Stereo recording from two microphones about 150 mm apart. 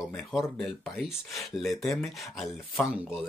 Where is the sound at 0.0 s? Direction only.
Centre (ahead or behind).